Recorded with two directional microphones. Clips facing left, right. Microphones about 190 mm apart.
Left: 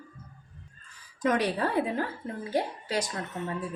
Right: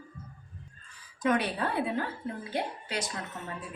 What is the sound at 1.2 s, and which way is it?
Speech, 40° left (ahead or behind).